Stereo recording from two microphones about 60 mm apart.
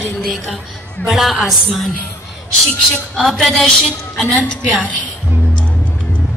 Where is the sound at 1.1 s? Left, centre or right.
Centre.